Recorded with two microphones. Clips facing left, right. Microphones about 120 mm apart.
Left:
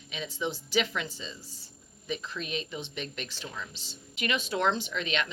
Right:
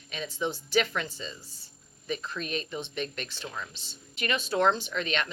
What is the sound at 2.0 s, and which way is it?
Speech, 50° right (ahead or behind).